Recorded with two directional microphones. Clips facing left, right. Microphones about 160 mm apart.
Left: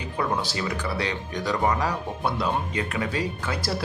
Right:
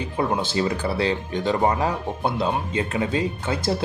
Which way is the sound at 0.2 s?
25° right (ahead or behind).